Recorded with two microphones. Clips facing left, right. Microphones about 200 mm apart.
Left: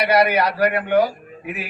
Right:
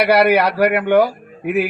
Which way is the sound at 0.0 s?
65° right (ahead or behind).